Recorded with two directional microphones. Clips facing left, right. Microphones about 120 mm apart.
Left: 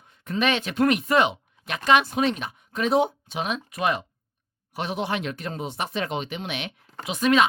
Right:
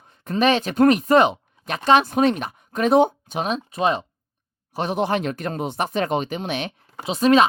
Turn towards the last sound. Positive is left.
turn(degrees=-30)  # may be behind; listen again after turning